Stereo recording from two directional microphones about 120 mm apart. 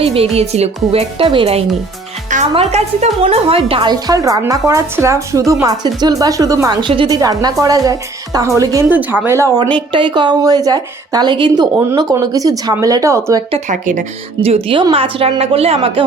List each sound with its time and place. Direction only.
0.0 s speech: 55° right (ahead or behind)
2.6 s a woman's voice: 60° right (ahead or behind)
3.9 s speech: 30° right (ahead or behind)
8.9 s speech: 15° right (ahead or behind)
9.9 s speech: 40° right (ahead or behind); by 13.4 s 25° right (ahead or behind)
13.7 s a woman's voice: 90° right
14.4 s a woman's voice: 50° right (ahead or behind)